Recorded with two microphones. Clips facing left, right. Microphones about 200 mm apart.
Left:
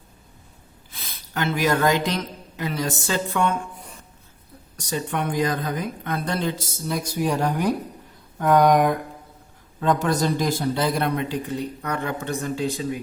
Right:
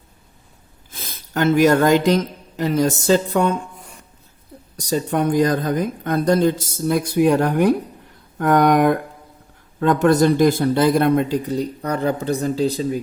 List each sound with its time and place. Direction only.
0.9 s speech: 45° right (ahead or behind)
4.8 s a man's voice: 35° right (ahead or behind)